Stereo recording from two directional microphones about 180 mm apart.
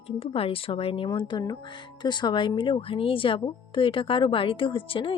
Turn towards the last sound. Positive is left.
turn(degrees=30)  # may be behind; listen again after turning